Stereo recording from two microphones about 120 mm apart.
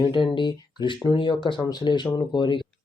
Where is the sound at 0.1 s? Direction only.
45° left (ahead or behind).